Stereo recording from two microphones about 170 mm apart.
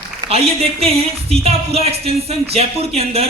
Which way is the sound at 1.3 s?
35° right (ahead or behind).